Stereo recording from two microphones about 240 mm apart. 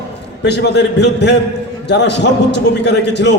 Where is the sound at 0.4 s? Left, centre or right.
Left.